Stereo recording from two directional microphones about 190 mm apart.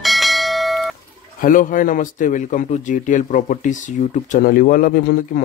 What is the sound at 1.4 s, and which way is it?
A man's voice, 45° left (ahead or behind).